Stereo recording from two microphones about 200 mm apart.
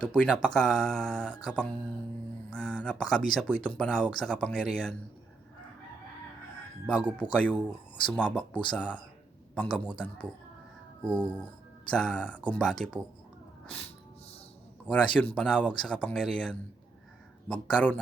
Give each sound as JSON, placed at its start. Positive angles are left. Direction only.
{"t": 0.0, "sound": "speech", "side_deg": 5}
{"t": 6.8, "sound": "speech", "side_deg": 5}
{"t": 11.9, "sound": "speech", "side_deg": 5}
{"t": 14.8, "sound": "speech", "side_deg": 5}